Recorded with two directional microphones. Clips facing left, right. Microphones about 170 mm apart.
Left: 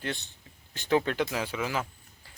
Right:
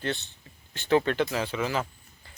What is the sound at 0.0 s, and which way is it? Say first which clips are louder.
Speech: right 4 dB; 10° left (ahead or behind).